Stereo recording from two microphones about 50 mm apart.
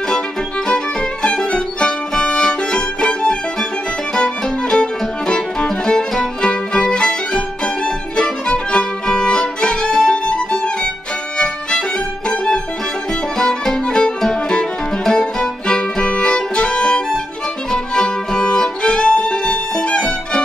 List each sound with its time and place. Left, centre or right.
1.2 s music: centre
13.4 s music: centre